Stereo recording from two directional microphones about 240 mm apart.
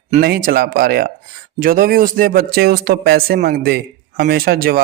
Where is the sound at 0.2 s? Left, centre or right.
Right.